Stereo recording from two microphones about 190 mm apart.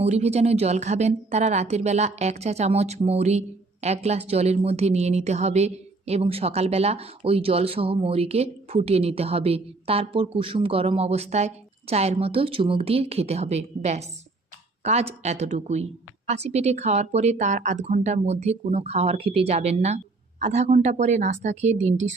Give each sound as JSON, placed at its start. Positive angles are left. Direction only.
{"t": 0.0, "sound": "a woman's voice", "side_deg": -35}